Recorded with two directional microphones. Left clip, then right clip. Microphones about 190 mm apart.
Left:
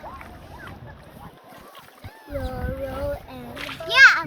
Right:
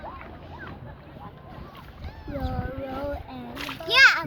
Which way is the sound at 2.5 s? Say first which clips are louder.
Left 2 dB; 30° left (ahead or behind).